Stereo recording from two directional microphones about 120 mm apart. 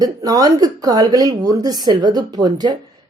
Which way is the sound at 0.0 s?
30° right (ahead or behind).